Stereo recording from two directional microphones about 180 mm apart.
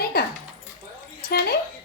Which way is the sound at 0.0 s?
60° left (ahead or behind).